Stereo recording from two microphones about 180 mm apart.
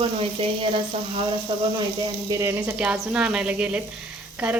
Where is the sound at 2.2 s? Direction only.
15° right (ahead or behind).